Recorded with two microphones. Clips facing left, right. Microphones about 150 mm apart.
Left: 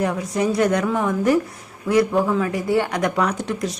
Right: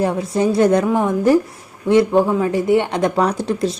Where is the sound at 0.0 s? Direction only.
30° right (ahead or behind).